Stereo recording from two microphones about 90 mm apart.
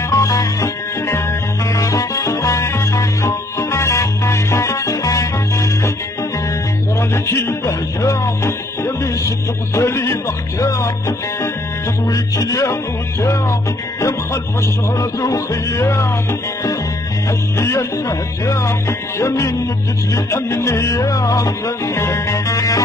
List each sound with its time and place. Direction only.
0.1 s music: 35° left (ahead or behind)
7.0 s music: 30° left (ahead or behind)
15.0 s music: 40° left (ahead or behind)
17.6 s speech: 35° left (ahead or behind)
20.2 s music: 30° left (ahead or behind)